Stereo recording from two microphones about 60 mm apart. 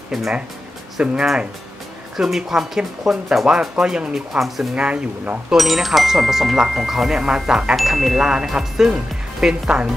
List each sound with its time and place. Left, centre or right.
1.2 s speech: centre
4.7 s speech: centre
5.5 s speech: centre
7.7 s speech: centre